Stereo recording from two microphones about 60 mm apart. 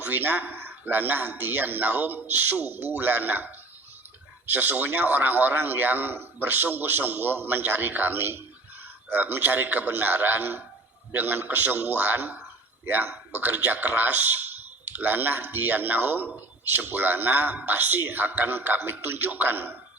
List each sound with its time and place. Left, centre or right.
0.0 s a man's voice: right